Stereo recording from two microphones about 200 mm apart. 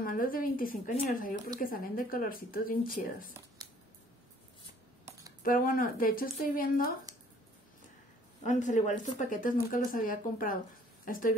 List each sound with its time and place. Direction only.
0.0 s speech: 45° left (ahead or behind)
5.4 s speech: 45° left (ahead or behind)
8.4 s speech: 40° left (ahead or behind)